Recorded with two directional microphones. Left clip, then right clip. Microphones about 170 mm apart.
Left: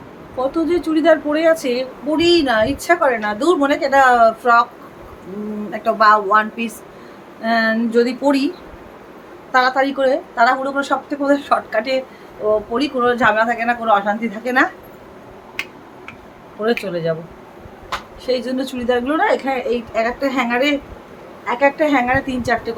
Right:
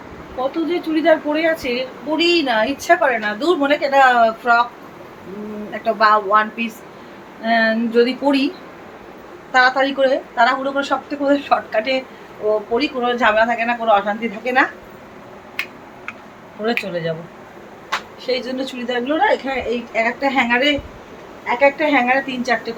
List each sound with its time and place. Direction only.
0.3 s a woman's voice: 15° left (ahead or behind)
5.8 s a woman's voice: 20° left (ahead or behind)
9.5 s a woman's voice: 20° left (ahead or behind)
16.6 s a woman's voice: 20° left (ahead or behind)
18.3 s a woman's voice: 20° left (ahead or behind)